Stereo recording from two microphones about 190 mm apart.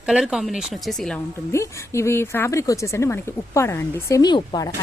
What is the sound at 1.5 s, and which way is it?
Speech, 15° left (ahead or behind).